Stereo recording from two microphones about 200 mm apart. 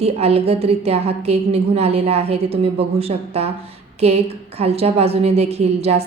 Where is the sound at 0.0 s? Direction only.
30° right (ahead or behind).